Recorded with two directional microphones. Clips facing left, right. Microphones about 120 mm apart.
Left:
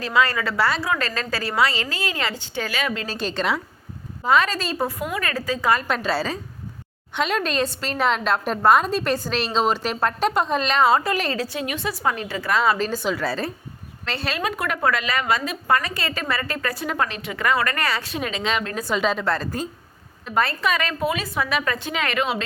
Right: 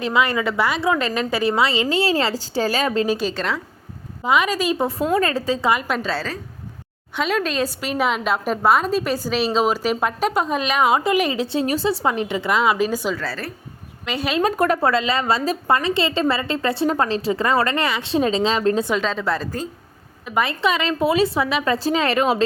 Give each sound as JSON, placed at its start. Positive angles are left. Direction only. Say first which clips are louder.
{"t": 0.0, "sound": "a woman's voice", "louder": "right 2 dB", "side_deg": -20}
{"t": 3.2, "sound": "a woman's voice", "louder": "right 2 dB", "side_deg": -5}
{"t": 4.2, "sound": "a woman's voice", "louder": "right 1 dB", "side_deg": -15}
{"t": 5.9, "sound": "a woman's voice", "louder": "even", "side_deg": 5}
{"t": 7.2, "sound": "a woman's voice", "louder": "right 1 dB", "side_deg": 0}
{"t": 11.4, "sound": "a woman's voice", "louder": "right 7 dB", "side_deg": -30}
{"t": 13.1, "sound": "a woman's voice", "louder": "left 3 dB", "side_deg": 20}
{"t": 14.0, "sound": "speech", "louder": "right 4 dB", "side_deg": -10}
{"t": 14.4, "sound": "a woman's voice", "louder": "right 5 dB", "side_deg": -40}
{"t": 18.9, "sound": "a woman's voice", "louder": "even", "side_deg": 5}
{"t": 19.2, "sound": "a woman's voice", "louder": "right 1 dB", "side_deg": -5}
{"t": 20.6, "sound": "a woman's voice", "louder": "right 3 dB", "side_deg": -25}